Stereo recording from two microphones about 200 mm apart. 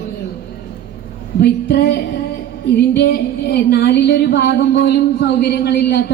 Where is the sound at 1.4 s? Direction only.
55° left (ahead or behind).